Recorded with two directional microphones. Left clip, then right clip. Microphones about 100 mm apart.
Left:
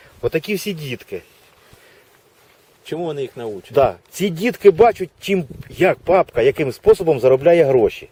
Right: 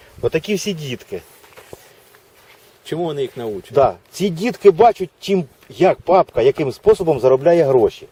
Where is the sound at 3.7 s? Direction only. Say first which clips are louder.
Right 1 dB; 60° left (ahead or behind).